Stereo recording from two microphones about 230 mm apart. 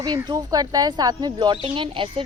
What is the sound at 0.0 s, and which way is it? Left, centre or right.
Speech, centre.